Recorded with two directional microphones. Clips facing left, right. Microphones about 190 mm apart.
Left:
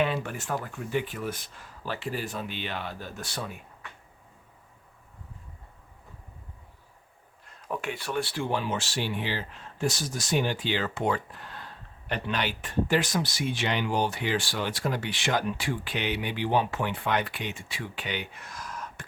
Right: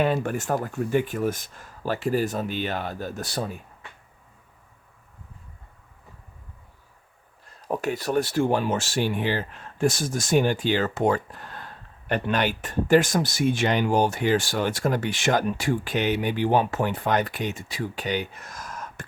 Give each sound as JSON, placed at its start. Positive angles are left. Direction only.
{"t": 0.0, "sound": "speech", "side_deg": -45}
{"t": 7.4, "sound": "speech", "side_deg": -40}